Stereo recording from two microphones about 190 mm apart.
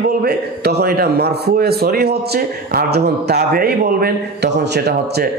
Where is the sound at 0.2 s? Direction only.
60° right (ahead or behind).